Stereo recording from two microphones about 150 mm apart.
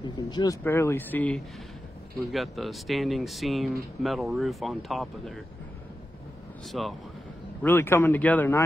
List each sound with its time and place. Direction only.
0.0 s speech: 25° left (ahead or behind)
0.7 s speech: 15° left (ahead or behind)
2.3 s speech: centre (ahead or behind)
6.7 s speech: centre (ahead or behind)
7.6 s speech: 15° left (ahead or behind)